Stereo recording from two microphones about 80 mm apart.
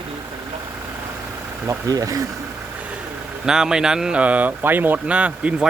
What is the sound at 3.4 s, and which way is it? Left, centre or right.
Speech, centre.